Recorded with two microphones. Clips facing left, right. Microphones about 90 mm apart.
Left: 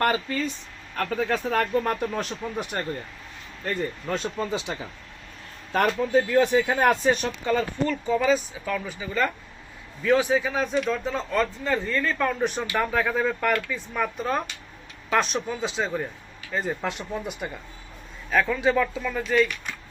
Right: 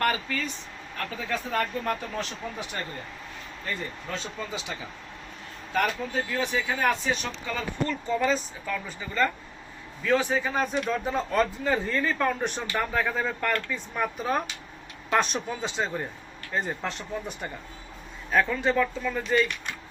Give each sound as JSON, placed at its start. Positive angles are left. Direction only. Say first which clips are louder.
{"t": 0.0, "sound": "speech", "louder": "left 3 dB", "side_deg": 25}
{"t": 0.9, "sound": "speech", "louder": "left 6 dB", "side_deg": 60}
{"t": 2.1, "sound": "speech", "louder": "left 4 dB", "side_deg": 50}
{"t": 3.7, "sound": "speech", "louder": "left 6 dB", "side_deg": 40}
{"t": 5.7, "sound": "speech", "louder": "left 6 dB", "side_deg": 55}
{"t": 7.5, "sound": "speech", "louder": "left 5 dB", "side_deg": 5}